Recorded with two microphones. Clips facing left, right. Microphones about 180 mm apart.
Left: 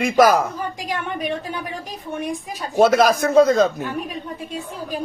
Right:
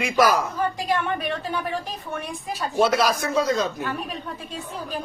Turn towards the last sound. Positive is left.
turn(degrees=50)  # may be behind; listen again after turning